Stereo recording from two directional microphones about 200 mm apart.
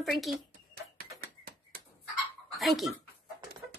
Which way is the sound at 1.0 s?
45° right (ahead or behind).